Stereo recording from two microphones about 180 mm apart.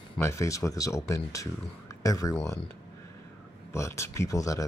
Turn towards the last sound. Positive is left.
turn(degrees=20)  # may be behind; listen again after turning